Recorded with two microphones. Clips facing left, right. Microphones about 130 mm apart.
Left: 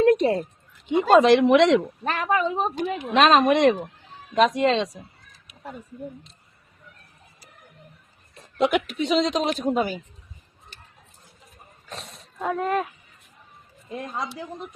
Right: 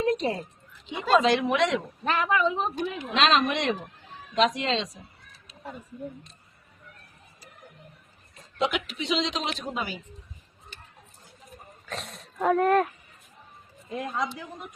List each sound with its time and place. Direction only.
0.0 s a sound: 65° left (ahead or behind)
0.9 s a woman's voice: 55° left (ahead or behind)
1.5 s speech: 90° left
2.0 s speech: 40° left (ahead or behind)
3.0 s a woman's voice: 60° left (ahead or behind)
8.4 s a woman's voice: 55° left (ahead or behind)
11.9 s a sound: centre (ahead or behind)
12.5 s speech: 5° left (ahead or behind)